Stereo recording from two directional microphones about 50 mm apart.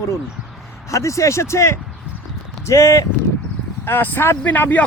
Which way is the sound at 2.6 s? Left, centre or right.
Left.